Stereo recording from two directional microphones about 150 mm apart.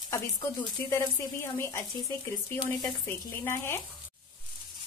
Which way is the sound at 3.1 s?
15° left (ahead or behind).